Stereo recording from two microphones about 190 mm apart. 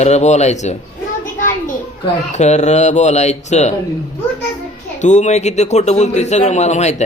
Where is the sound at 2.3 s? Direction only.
35° left (ahead or behind).